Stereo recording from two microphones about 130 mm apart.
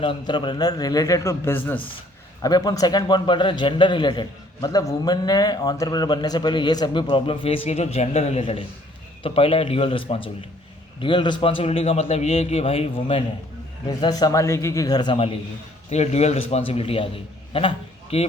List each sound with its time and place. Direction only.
0.0 s a man's voice: 40° left (ahead or behind); by 1.8 s 15° left (ahead or behind)
2.4 s a man's voice: 30° left (ahead or behind); by 13.2 s 45° left (ahead or behind)
13.8 s a man's voice: 30° left (ahead or behind)
15.9 s a man's voice: 55° left (ahead or behind)